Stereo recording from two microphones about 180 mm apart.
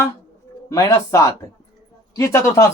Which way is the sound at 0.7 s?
15° left (ahead or behind).